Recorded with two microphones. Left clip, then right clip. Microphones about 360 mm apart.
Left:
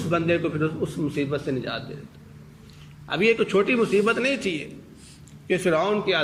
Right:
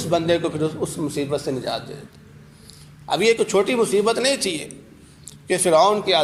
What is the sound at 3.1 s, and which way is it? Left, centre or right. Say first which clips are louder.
A man's voice: right 3 dB; centre.